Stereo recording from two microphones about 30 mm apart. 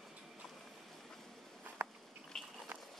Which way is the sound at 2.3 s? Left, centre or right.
Centre.